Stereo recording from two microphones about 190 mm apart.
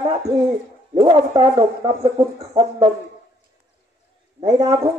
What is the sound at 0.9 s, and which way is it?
Speech, 25° right (ahead or behind).